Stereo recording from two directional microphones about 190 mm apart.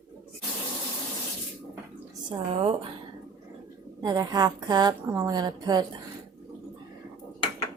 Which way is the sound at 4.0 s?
20° right (ahead or behind).